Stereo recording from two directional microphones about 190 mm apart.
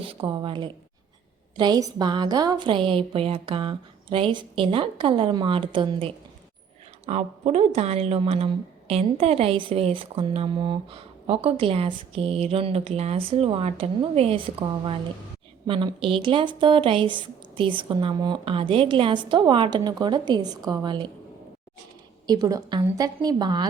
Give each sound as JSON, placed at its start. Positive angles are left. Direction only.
{"t": 0.0, "sound": "speech", "side_deg": -30}
{"t": 22.3, "sound": "speech", "side_deg": -20}